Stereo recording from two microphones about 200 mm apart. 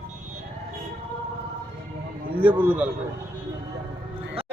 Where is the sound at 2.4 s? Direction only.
10° right (ahead or behind).